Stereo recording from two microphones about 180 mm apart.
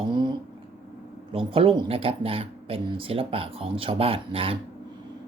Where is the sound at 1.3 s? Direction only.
30° right (ahead or behind).